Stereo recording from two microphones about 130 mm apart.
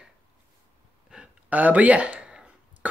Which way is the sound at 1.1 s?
10° right (ahead or behind).